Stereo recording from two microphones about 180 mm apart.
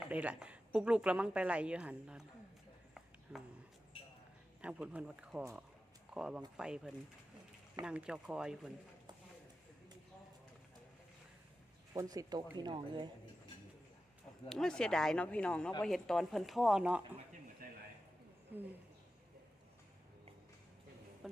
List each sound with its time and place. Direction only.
0.1 s a woman's voice: 10° right (ahead or behind)
3.3 s a woman's voice: 5° right (ahead or behind)
4.6 s a woman's voice: 5° right (ahead or behind)
11.9 s speech: 20° right (ahead or behind)
14.5 s a woman's voice: 5° left (ahead or behind)